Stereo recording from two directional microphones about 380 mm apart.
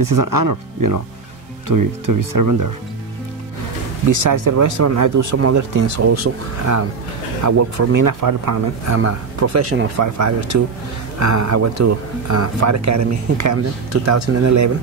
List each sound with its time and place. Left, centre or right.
0.0 s speech: right
4.1 s speech: right
8.9 s speech: right